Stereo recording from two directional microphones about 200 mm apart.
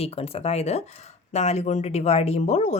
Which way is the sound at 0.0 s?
30° left (ahead or behind).